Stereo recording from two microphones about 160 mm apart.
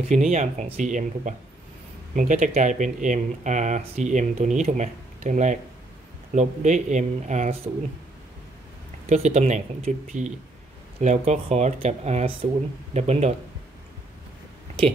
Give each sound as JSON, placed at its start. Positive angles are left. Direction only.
{"t": 0.1, "sound": "speech", "side_deg": -45}
{"t": 9.1, "sound": "speech", "side_deg": -45}